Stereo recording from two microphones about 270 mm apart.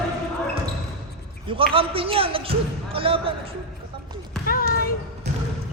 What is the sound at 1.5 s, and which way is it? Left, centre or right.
A man's voice, centre.